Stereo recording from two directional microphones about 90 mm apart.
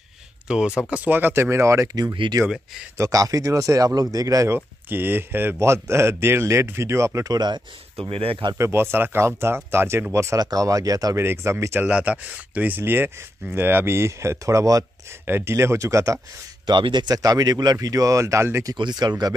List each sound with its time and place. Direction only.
0.5 s speech: 10° right (ahead or behind); by 1.9 s 35° right (ahead or behind)
2.2 s speech: 60° right (ahead or behind)
3.0 s speech: 40° right (ahead or behind)
4.6 s speech: 25° right (ahead or behind)
7.3 s speech: 55° right (ahead or behind)
8.1 s speech: 90° right
8.5 s speech: 25° right (ahead or behind)
11.1 s speech: 30° right (ahead or behind)
11.8 s speech: 15° right (ahead or behind); by 14.9 s 40° right (ahead or behind)
15.2 s speech: 25° right (ahead or behind)
16.6 s speech: 60° right (ahead or behind); by 18.8 s 35° right (ahead or behind)
18.8 s speech: 55° right (ahead or behind)